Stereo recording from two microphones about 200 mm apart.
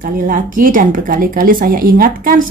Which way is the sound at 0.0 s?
40° right (ahead or behind).